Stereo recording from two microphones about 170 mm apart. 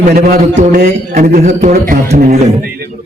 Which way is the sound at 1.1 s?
50° right (ahead or behind).